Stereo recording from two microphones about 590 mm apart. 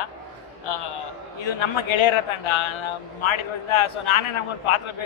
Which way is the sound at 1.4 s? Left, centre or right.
Left.